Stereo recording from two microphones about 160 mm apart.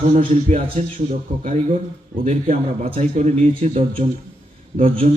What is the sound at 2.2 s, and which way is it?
A man's voice, 40° right (ahead or behind).